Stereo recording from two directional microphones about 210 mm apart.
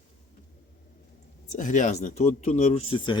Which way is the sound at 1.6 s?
35° left (ahead or behind).